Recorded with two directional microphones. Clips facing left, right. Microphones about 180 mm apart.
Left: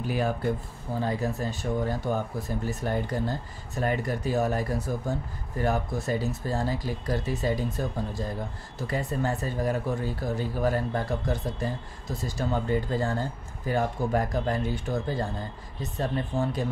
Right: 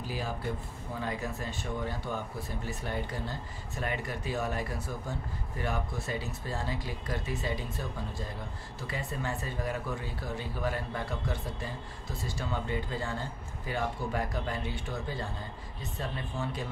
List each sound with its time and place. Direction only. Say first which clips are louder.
0.0 s speech: left 9 dB; 60° left (ahead or behind)
0.9 s speech: left 7 dB; 35° left (ahead or behind)